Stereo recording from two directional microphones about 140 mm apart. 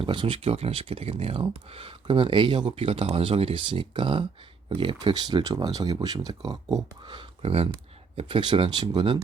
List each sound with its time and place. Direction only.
0.0 s speech: 35° right (ahead or behind)